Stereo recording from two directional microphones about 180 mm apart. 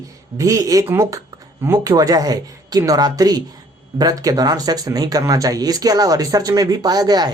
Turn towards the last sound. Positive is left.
turn(degrees=-20)  # may be behind; listen again after turning